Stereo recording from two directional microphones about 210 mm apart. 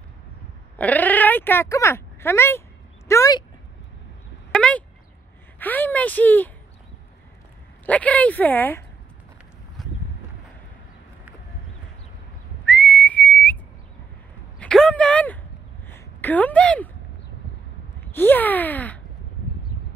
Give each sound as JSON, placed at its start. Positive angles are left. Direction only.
{"t": 0.7, "sound": "speech", "side_deg": 5}
{"t": 4.5, "sound": "speech", "side_deg": 5}
{"t": 7.8, "sound": "speech", "side_deg": 5}
{"t": 9.8, "sound": "a sound", "side_deg": 0}
{"t": 12.6, "sound": "whistling", "side_deg": 5}
{"t": 14.6, "sound": "a sound", "side_deg": 5}
{"t": 15.9, "sound": "a woman's voice", "side_deg": 10}
{"t": 18.0, "sound": "speech", "side_deg": 10}